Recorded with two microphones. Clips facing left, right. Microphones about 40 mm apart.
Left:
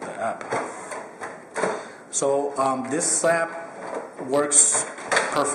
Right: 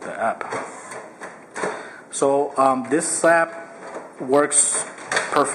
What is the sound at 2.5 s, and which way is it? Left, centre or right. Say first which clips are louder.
Speech: right 5 dB; centre.